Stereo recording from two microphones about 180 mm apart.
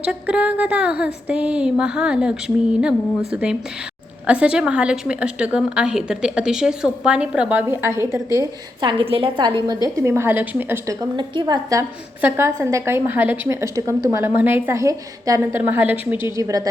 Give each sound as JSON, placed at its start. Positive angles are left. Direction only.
{"t": 0.0, "sound": "a woman's voice", "side_deg": -5}
{"t": 11.2, "sound": "a woman's voice", "side_deg": -25}